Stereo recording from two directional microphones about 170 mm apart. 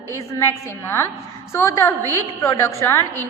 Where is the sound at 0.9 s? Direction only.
15° left (ahead or behind).